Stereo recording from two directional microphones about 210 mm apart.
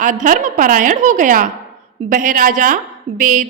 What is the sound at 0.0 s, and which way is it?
A woman's voice, 40° right (ahead or behind).